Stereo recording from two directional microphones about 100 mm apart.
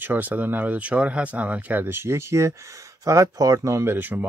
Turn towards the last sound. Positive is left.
turn(degrees=-20)  # may be behind; listen again after turning